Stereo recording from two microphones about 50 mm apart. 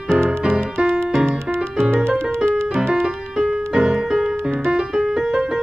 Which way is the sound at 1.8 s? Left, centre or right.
Right.